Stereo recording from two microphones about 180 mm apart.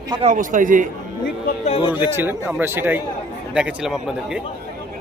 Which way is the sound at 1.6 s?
35° left (ahead or behind).